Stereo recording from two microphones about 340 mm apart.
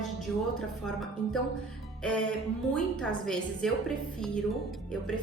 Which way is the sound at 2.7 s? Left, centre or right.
Centre.